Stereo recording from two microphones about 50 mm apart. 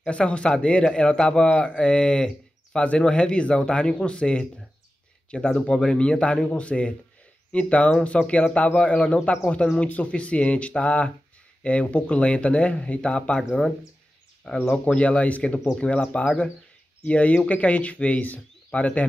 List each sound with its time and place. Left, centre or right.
0.0 s speech: left
14.7 s speech: left